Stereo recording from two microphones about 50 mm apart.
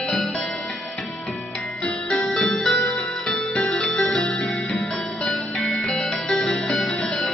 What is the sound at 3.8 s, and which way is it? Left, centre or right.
Music, centre.